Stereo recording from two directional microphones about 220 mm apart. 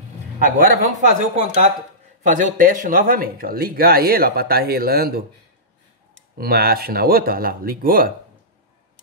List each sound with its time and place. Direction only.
0.4 s speech: 35° right (ahead or behind)
6.3 s speech: 45° right (ahead or behind)